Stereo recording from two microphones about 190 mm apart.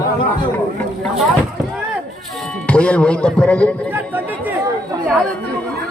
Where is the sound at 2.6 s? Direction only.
5° left (ahead or behind).